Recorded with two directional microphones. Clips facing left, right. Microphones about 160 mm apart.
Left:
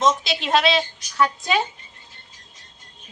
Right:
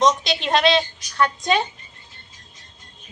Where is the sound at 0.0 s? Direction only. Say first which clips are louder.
Right 2 dB; 5° left (ahead or behind).